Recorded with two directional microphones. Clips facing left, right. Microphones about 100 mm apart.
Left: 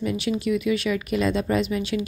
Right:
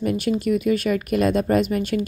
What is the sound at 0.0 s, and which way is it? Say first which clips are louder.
A woman's voice: right 3 dB; 45° right (ahead or behind).